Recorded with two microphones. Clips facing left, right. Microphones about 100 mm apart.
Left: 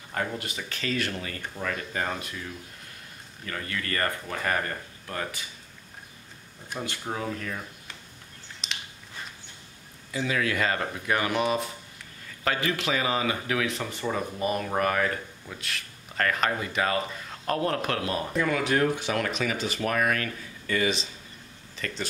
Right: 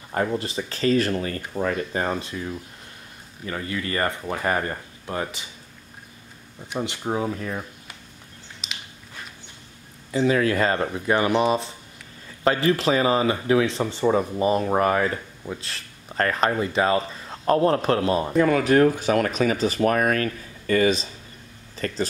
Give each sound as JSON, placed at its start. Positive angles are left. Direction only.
{"t": 0.1, "sound": "speech", "side_deg": -30}
{"t": 6.7, "sound": "speech", "side_deg": -20}
{"t": 8.6, "sound": "biting", "side_deg": -5}
{"t": 10.1, "sound": "speech", "side_deg": -35}
{"t": 18.5, "sound": "speech", "side_deg": -40}